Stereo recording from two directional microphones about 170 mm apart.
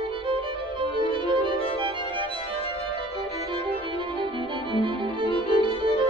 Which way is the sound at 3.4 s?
30° right (ahead or behind).